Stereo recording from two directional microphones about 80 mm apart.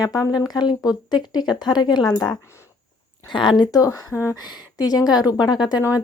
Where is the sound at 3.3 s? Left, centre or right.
Left.